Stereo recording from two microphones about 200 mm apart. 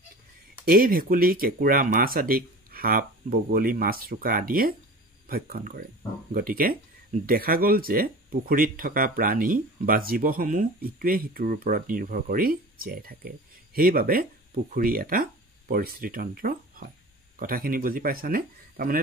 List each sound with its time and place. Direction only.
0.7 s speech: 45° right (ahead or behind)